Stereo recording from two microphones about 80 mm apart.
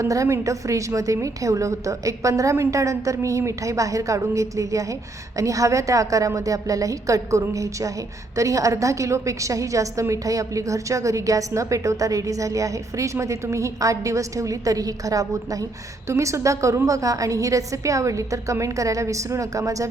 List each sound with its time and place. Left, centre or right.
0.0 s a woman's voice: right